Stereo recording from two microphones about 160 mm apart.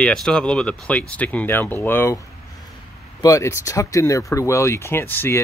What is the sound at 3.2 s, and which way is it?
Speech, 20° left (ahead or behind).